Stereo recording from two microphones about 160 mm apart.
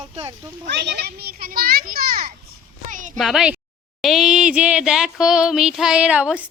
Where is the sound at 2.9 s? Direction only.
55° right (ahead or behind).